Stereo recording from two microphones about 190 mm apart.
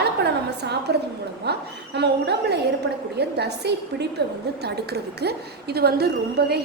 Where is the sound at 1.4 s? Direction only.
60° right (ahead or behind).